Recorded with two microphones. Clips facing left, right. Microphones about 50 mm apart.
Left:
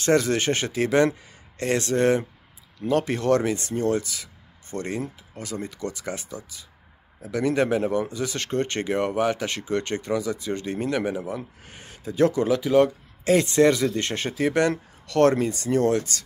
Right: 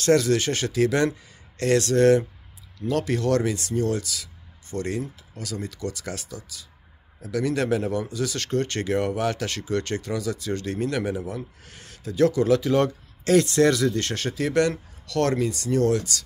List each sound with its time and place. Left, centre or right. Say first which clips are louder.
0.0 s speech: right 1 dB; left
12.4 s speech: left 1 dB; centre; by 16.3 s left